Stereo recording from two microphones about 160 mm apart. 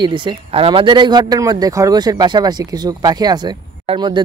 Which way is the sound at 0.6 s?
30° right (ahead or behind).